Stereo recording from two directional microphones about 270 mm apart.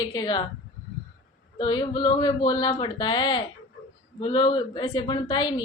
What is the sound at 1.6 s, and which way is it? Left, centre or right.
A woman's voice, centre.